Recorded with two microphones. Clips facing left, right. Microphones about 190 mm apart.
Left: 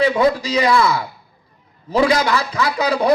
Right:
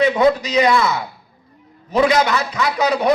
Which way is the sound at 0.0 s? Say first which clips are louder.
Right 1 dB; 30° left (ahead or behind).